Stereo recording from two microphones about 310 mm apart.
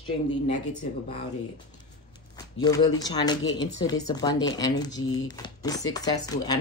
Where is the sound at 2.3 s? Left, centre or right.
Centre.